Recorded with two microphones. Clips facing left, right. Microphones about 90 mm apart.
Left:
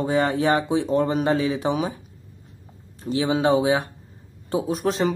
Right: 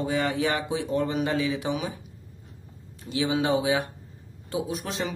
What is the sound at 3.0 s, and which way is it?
Speech, 35° left (ahead or behind).